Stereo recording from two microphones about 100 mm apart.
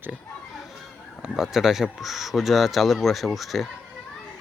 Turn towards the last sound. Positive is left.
turn(degrees=0)  # may be behind; listen again after turning